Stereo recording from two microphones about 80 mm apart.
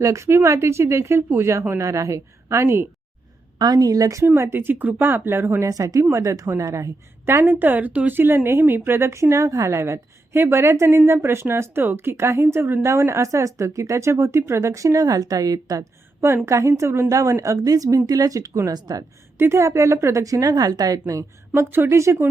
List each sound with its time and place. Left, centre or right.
0.0 s a woman's voice: right
3.6 s speech: right
4.4 s a woman's voice: right
18.7 s speech: right
19.4 s a woman's voice: right
21.1 s a woman's voice: right